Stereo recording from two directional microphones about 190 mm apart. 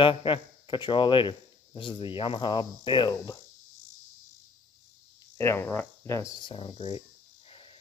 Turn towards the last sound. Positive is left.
turn(degrees=30)  # may be behind; listen again after turning